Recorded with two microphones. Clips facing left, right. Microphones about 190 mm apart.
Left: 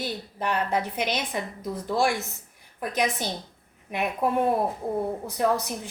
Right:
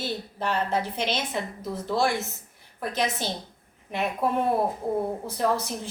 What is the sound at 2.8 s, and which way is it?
A woman's voice, 15° left (ahead or behind).